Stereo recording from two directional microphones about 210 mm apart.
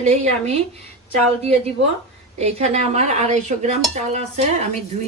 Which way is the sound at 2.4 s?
30° right (ahead or behind).